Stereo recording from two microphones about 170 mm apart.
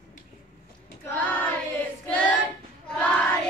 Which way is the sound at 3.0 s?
5° left (ahead or behind).